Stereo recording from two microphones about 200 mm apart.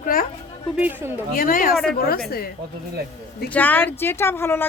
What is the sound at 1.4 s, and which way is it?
Speech, 45° left (ahead or behind).